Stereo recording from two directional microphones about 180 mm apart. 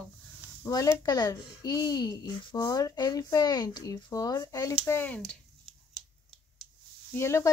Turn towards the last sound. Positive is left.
turn(degrees=15)  # may be behind; listen again after turning